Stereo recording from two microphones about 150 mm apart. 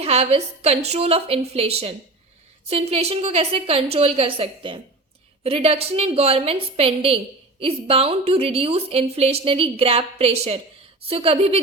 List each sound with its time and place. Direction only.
0.0 s a woman's voice: 45° right (ahead or behind)